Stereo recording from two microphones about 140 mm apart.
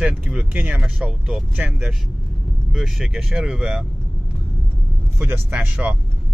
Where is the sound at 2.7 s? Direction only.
5° right (ahead or behind).